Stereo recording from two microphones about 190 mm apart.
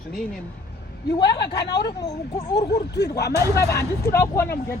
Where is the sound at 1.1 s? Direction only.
20° left (ahead or behind).